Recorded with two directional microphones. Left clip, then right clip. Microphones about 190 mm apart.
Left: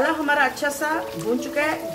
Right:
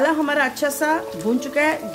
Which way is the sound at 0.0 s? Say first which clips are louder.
Right 1 dB; 55° right (ahead or behind).